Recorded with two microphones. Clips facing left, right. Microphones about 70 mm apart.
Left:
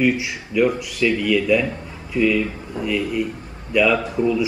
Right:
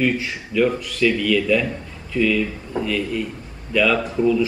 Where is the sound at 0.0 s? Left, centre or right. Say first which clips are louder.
Left 2 dB; centre.